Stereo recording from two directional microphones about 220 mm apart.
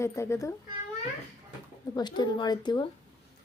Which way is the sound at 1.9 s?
20° left (ahead or behind).